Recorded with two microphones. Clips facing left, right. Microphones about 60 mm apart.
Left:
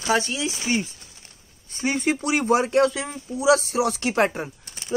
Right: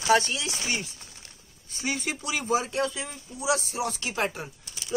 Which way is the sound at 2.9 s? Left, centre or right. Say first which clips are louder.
Left 7 dB; left.